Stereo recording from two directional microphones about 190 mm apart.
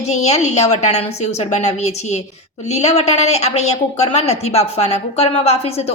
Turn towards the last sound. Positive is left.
turn(degrees=30)  # may be behind; listen again after turning